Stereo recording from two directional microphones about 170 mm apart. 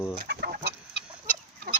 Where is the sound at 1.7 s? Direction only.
60° right (ahead or behind).